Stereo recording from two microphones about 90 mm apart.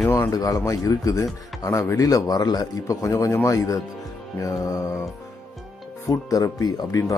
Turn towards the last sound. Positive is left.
turn(degrees=40)  # may be behind; listen again after turning